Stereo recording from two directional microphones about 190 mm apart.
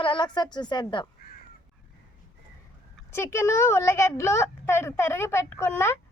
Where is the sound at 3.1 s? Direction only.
15° left (ahead or behind).